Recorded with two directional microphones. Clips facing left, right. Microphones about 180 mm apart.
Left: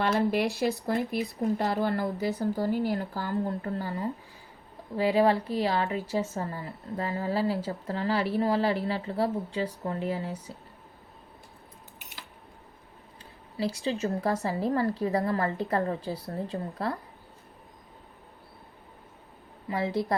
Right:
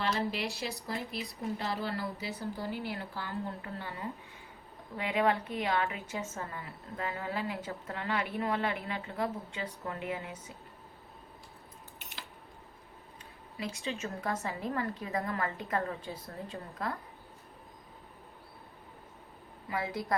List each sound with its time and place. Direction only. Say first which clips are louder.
0.0 s speech: left 8 dB; 55° left (ahead or behind); by 10.6 s 35° left (ahead or behind)
13.6 s speech: left 8 dB; 35° left (ahead or behind)
19.7 s a woman's voice: left 6 dB; 30° left (ahead or behind)